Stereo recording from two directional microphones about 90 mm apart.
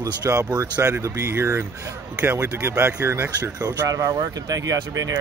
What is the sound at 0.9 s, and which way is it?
Speech, 30° right (ahead or behind).